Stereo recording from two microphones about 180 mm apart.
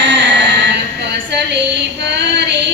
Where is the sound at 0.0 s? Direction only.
80° right.